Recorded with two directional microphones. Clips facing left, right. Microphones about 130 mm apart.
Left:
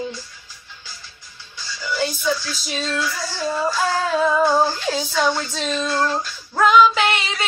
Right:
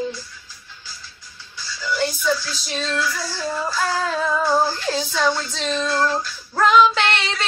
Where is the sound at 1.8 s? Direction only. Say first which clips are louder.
Right 1 dB; 15° left (ahead or behind).